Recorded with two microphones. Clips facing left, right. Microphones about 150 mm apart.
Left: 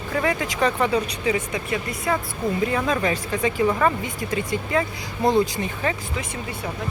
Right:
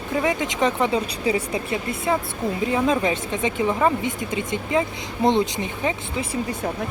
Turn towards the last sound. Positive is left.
turn(degrees=-20)  # may be behind; listen again after turning